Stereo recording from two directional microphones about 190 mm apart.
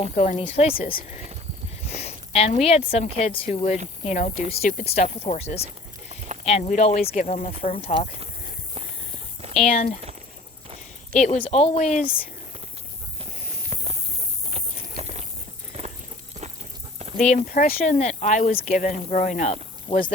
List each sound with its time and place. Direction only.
0.0 s speech: 35° left (ahead or behind)
0.8 s speech: 50° left (ahead or behind)
2.0 s a sound: 35° left (ahead or behind)
2.5 s speech: 35° left (ahead or behind)
9.6 s speech: 35° left (ahead or behind)
11.4 s speech: 30° left (ahead or behind)
14.9 s biting: 35° right (ahead or behind)
15.7 s walk: 35° right (ahead or behind)
17.2 s speech: 45° left (ahead or behind)